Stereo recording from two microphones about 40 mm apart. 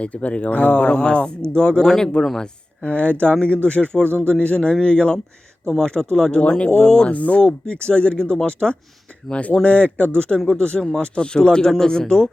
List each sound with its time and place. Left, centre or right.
0.0 s speech: left; by 2.5 s centre
2.8 s speech: left
4.0 s speech: right
4.3 s speech: left
7.1 s speech: left; by 12.3 s centre